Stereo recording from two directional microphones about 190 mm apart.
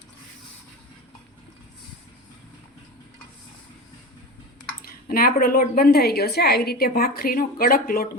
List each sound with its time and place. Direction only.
4.8 s a woman's voice: 50° left (ahead or behind)